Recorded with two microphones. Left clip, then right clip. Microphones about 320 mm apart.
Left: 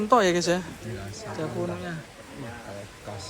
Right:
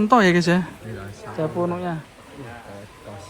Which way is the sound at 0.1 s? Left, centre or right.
Right.